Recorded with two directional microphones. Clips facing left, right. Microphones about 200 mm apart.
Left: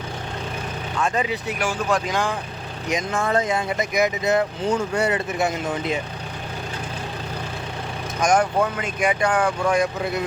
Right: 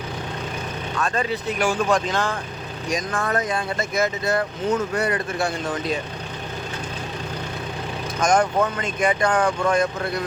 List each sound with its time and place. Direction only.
1.0 s speech: 15° left (ahead or behind)
8.2 s speech: 10° left (ahead or behind)